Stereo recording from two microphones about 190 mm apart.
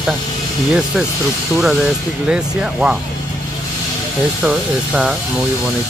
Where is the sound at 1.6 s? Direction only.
Centre (ahead or behind).